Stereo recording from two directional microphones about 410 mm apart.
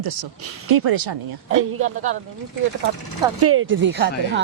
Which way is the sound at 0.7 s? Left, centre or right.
Right.